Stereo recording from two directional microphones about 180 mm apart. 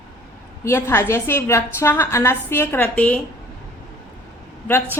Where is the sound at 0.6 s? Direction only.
15° left (ahead or behind).